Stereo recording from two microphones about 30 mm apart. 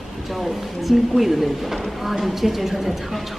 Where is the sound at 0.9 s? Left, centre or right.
Centre.